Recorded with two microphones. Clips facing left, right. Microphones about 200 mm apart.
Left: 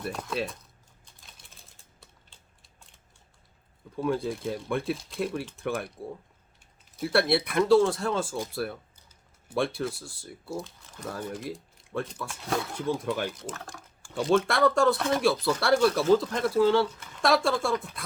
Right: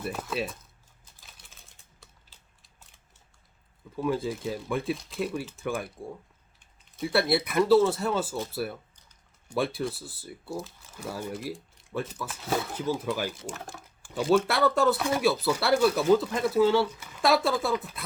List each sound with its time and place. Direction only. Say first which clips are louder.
0.0 s speech: even; 5° right (ahead or behind)
1.2 s typing: even; centre (ahead or behind)
3.9 s speech: even; centre (ahead or behind)